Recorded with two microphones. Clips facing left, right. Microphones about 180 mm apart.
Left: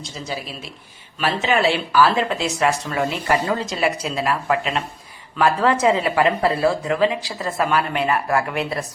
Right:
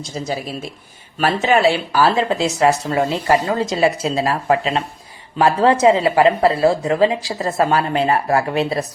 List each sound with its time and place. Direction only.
0.3 s speech: 45° right (ahead or behind); by 7.4 s 30° right (ahead or behind)
7.4 s speech: 40° right (ahead or behind)